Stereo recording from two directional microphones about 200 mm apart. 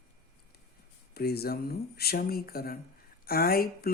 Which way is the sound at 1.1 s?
50° left (ahead or behind).